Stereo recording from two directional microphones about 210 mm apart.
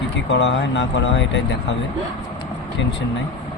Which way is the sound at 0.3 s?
55° left (ahead or behind).